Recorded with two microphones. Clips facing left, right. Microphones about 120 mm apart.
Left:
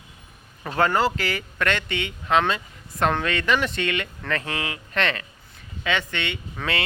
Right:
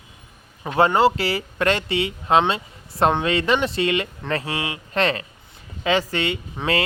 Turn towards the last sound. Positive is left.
turn(degrees=-20)  # may be behind; listen again after turning